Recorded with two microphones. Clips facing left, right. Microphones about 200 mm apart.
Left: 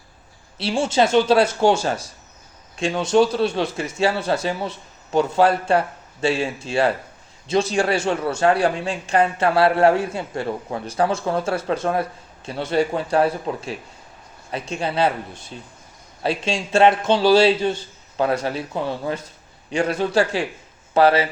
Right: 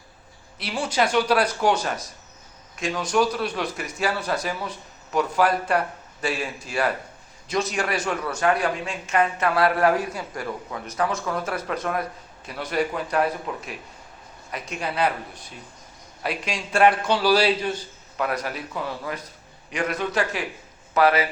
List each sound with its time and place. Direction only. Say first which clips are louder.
0.6 s speech: left 5 dB; 25° left (ahead or behind)